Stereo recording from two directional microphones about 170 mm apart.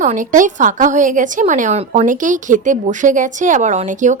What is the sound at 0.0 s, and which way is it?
A woman's voice, 50° right (ahead or behind).